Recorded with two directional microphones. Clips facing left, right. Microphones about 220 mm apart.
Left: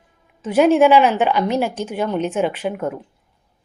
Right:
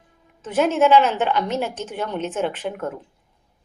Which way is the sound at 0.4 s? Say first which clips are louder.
Left 5 dB; 10° left (ahead or behind).